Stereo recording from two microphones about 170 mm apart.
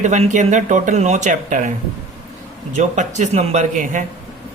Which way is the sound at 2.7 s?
45° right (ahead or behind).